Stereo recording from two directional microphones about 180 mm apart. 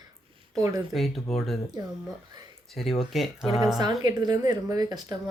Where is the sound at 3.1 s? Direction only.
Centre (ahead or behind).